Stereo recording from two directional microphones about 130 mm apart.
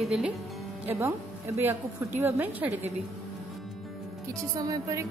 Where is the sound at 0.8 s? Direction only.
20° right (ahead or behind).